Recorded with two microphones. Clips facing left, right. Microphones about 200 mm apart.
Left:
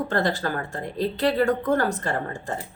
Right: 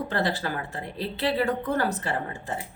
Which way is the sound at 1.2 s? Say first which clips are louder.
Left 3 dB; 45° left (ahead or behind).